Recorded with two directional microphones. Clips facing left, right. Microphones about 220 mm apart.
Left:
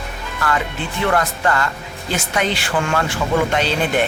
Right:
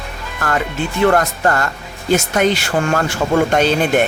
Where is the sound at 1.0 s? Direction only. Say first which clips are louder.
Right 4 dB; 45° right (ahead or behind).